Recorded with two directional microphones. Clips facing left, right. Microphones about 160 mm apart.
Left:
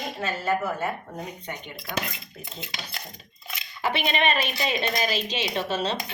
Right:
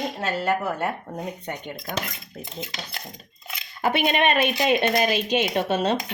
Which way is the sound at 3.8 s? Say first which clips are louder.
Right 4 dB; 50° right (ahead or behind).